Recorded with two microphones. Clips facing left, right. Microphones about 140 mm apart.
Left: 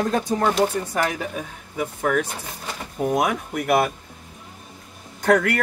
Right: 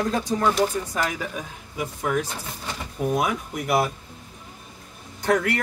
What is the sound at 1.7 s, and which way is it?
Speech, 55° left (ahead or behind).